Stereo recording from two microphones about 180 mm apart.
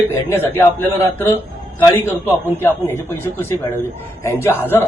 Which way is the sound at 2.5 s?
10° left (ahead or behind).